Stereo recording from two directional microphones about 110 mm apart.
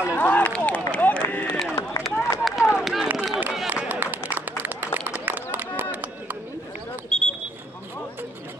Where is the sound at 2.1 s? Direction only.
25° left (ahead or behind).